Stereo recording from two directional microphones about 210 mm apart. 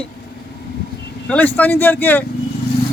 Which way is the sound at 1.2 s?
10° left (ahead or behind).